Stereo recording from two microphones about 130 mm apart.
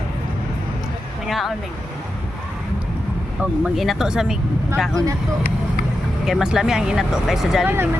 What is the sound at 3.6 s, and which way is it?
Speech, centre (ahead or behind).